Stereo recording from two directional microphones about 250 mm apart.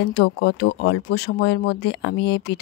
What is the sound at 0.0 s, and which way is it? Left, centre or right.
Speech, left.